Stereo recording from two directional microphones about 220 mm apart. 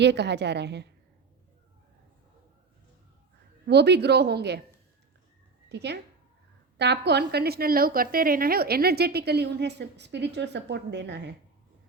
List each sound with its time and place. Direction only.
0.0 s a woman's voice: 50° right (ahead or behind)
3.7 s a woman's voice: 50° right (ahead or behind)
5.6 s a woman's voice: 50° right (ahead or behind)